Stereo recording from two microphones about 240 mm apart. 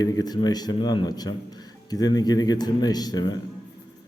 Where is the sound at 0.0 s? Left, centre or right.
Centre.